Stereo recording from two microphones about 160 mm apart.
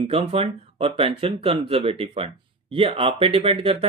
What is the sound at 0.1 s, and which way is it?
Speech, 35° right (ahead or behind).